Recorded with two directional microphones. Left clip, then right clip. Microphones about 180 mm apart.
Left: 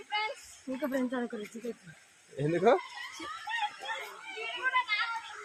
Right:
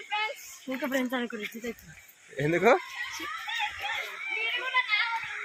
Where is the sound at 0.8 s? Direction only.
45° right (ahead or behind).